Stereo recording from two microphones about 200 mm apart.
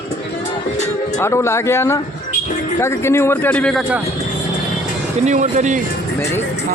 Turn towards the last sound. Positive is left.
turn(degrees=-40)  # may be behind; listen again after turning